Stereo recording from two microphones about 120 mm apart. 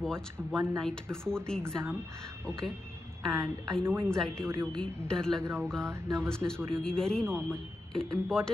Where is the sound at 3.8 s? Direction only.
20° right (ahead or behind).